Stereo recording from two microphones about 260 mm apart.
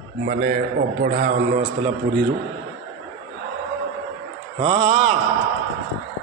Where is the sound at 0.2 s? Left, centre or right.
Right.